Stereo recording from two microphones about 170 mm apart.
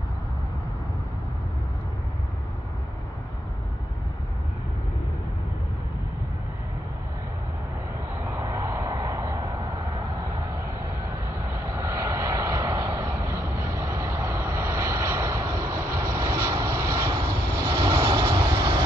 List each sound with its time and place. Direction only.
8.3 s vehicle: 15° right (ahead or behind)
11.6 s vehicle: 15° right (ahead or behind)